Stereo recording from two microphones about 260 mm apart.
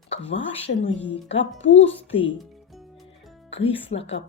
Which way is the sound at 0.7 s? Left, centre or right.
Left.